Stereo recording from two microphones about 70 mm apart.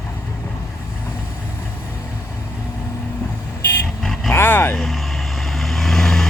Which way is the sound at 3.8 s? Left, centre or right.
Centre.